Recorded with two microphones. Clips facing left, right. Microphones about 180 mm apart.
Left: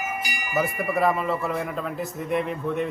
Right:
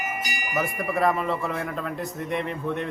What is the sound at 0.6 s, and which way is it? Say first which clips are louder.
A man's voice: even; centre (ahead or behind).